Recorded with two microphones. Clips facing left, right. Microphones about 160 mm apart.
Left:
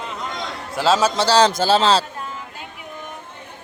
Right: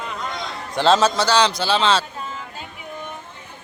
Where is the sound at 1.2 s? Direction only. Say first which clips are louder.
Left 3 dB; 35° left (ahead or behind).